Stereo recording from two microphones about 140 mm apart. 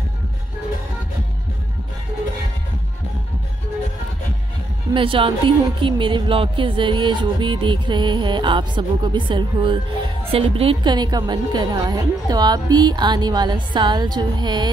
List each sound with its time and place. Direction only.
4.9 s speech: 40° right (ahead or behind)